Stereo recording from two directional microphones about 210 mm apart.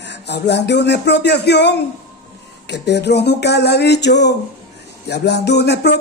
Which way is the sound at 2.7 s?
55° left (ahead or behind).